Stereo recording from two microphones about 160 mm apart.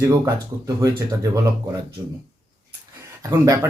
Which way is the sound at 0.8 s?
20° right (ahead or behind).